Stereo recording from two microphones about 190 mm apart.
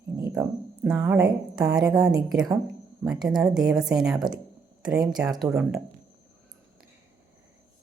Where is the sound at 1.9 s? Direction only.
20° right (ahead or behind); by 5.8 s 5° right (ahead or behind).